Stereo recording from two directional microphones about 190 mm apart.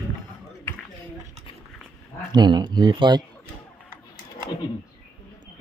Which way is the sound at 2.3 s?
20° right (ahead or behind).